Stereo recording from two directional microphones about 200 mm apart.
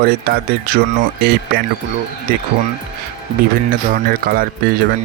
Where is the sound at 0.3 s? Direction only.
50° right (ahead or behind).